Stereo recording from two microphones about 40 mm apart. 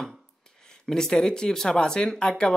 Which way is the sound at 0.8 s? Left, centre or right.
Centre.